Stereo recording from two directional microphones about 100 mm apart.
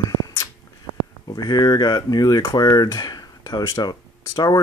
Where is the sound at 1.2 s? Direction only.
40° left (ahead or behind).